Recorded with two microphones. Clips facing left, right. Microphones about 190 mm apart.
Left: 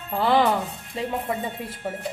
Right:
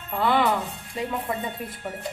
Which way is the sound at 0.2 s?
30° left (ahead or behind).